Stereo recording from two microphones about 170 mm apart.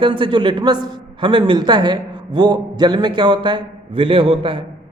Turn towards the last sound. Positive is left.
turn(degrees=-30)  # may be behind; listen again after turning